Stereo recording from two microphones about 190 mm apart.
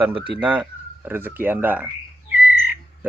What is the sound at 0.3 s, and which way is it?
Speech, 5° right (ahead or behind).